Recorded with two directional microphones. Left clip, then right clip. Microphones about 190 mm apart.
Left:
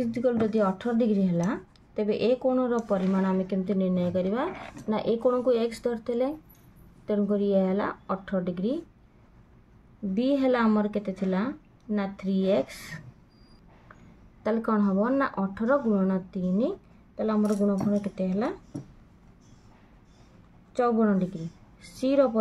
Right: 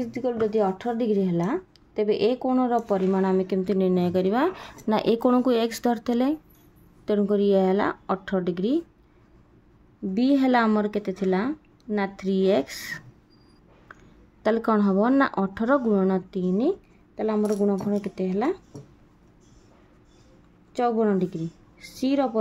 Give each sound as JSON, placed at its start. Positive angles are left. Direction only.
{"t": 0.4, "sound": "a woman's voice", "side_deg": -35}
{"t": 10.1, "sound": "a woman's voice", "side_deg": -45}
{"t": 14.4, "sound": "a woman's voice", "side_deg": -50}
{"t": 20.7, "sound": "a woman's voice", "side_deg": -40}